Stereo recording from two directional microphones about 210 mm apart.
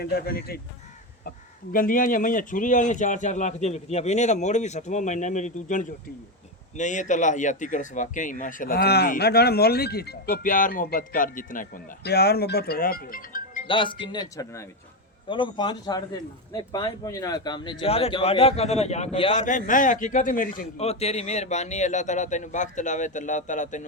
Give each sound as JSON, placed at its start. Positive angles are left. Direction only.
{"t": 0.0, "sound": "speech", "side_deg": 50}
{"t": 1.7, "sound": "speech", "side_deg": 40}
{"t": 13.7, "sound": "speech", "side_deg": 25}